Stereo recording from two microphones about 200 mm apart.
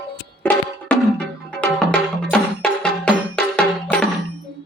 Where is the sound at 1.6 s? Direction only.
5° left (ahead or behind).